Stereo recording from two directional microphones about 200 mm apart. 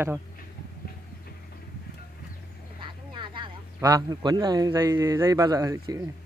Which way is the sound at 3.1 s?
25° right (ahead or behind).